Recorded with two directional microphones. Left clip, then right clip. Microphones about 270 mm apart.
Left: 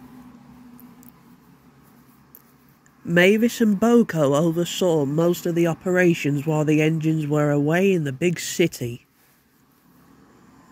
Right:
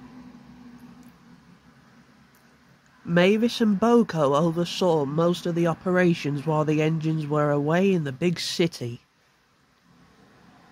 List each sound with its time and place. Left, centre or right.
3.1 s speech: centre